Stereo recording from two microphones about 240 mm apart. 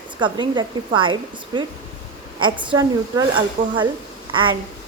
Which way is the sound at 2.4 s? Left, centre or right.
Centre.